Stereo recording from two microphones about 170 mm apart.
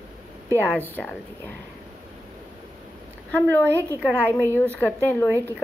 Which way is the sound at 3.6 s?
15° right (ahead or behind).